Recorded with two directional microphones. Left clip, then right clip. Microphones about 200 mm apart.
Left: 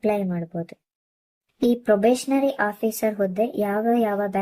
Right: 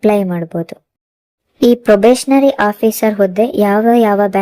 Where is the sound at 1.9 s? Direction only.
40° right (ahead or behind).